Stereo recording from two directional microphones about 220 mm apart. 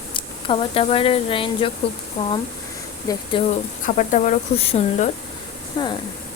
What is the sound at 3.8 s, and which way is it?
Speech, 35° left (ahead or behind).